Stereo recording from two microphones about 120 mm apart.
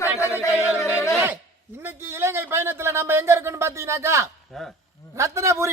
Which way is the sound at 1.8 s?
20° right (ahead or behind).